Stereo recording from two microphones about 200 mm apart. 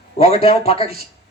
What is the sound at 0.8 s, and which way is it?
Speech, 50° right (ahead or behind).